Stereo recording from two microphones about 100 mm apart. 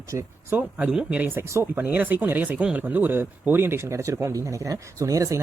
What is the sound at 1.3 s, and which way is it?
Speech, 25° right (ahead or behind).